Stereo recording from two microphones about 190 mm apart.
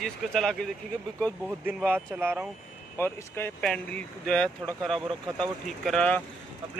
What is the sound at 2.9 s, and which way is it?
Speech, 10° left (ahead or behind).